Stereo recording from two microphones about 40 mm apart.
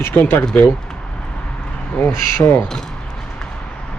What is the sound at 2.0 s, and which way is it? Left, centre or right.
Speech, left.